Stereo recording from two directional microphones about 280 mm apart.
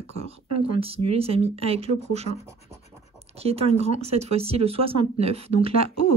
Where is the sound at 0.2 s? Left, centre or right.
Right.